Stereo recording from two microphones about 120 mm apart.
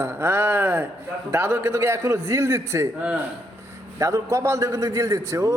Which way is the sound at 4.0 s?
25° right (ahead or behind).